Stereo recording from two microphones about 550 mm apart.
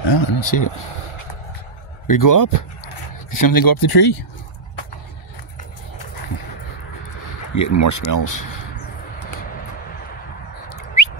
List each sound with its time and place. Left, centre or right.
0.1 s speech: left
2.0 s speech: left
7.5 s speech: left
10.7 s a sound: left